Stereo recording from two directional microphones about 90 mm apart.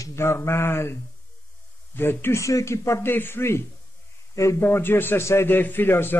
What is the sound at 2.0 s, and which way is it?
A man's voice, 25° left (ahead or behind).